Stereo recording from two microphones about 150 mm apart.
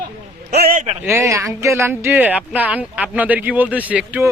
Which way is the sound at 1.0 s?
20° right (ahead or behind).